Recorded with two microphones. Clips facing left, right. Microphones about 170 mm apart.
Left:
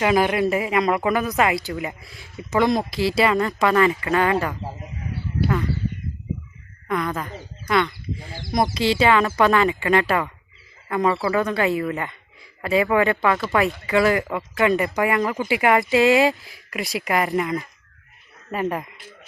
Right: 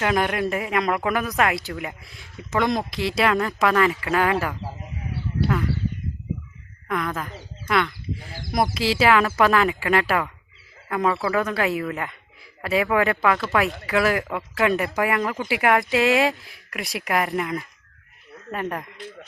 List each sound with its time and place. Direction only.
0.0 s speech: 5° left (ahead or behind)
6.8 s speech: centre (ahead or behind)